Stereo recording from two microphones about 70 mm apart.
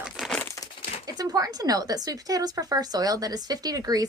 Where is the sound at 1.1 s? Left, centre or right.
Right.